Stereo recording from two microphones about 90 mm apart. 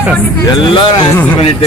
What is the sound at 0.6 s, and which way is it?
Speech, 65° left (ahead or behind).